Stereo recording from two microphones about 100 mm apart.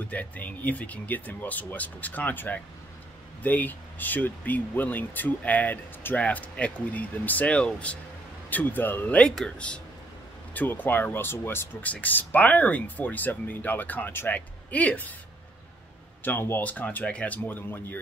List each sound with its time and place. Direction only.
0.1 s speech: 15° left (ahead or behind)
16.3 s speech: 20° left (ahead or behind)